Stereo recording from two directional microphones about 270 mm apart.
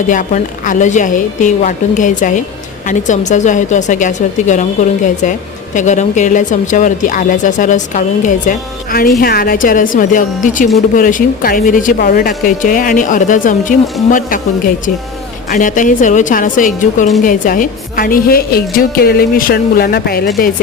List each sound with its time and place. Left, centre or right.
0.1 s a woman's voice: left
15.5 s a woman's voice: left